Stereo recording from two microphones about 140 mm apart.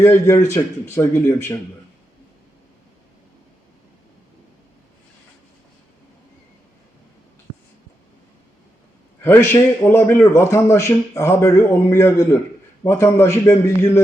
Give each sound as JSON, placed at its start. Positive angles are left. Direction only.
{"t": 0.0, "sound": "speech", "side_deg": 20}
{"t": 9.2, "sound": "a man's voice", "side_deg": 15}